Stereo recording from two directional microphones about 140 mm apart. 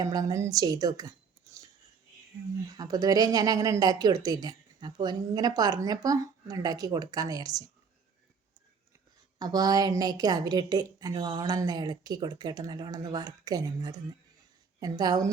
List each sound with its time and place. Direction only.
0.0 s speech: 25° right (ahead or behind)
2.7 s speech: 25° right (ahead or behind)
9.4 s speech: 30° right (ahead or behind)